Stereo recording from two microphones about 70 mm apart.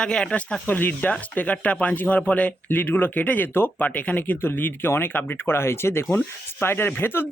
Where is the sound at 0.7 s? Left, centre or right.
Left.